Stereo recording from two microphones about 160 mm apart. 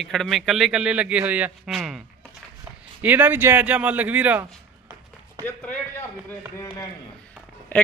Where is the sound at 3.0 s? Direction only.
10° right (ahead or behind).